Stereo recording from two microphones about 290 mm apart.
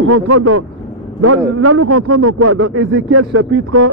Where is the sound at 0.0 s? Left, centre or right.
Right.